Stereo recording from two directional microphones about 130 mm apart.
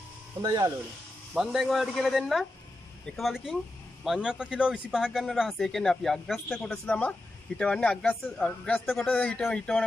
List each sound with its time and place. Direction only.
0.4 s speech: 30° right (ahead or behind)
1.3 s speech: 5° right (ahead or behind)